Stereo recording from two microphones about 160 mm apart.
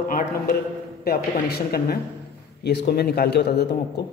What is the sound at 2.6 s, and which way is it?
Speech, 90° left.